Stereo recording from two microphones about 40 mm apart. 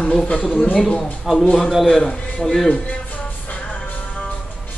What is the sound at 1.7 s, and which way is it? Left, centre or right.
Speech, centre.